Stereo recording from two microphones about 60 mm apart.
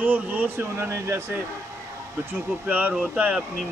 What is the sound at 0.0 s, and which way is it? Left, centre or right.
Speech, right.